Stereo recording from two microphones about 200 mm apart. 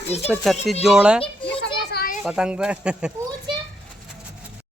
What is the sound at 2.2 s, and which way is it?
Speech, 5° right (ahead or behind).